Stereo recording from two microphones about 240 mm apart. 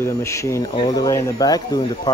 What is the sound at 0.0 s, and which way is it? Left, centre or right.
Speech, centre.